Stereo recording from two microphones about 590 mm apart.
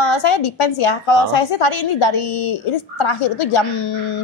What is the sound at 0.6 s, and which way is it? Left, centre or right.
Speech, left.